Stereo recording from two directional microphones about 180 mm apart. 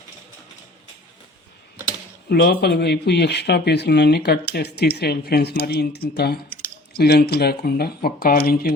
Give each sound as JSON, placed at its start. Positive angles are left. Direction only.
{"t": 2.3, "sound": "speech", "side_deg": 65}